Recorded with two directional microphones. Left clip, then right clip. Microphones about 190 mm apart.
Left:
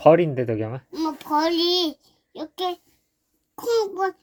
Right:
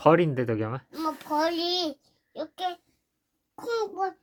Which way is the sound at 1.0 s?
10° right (ahead or behind).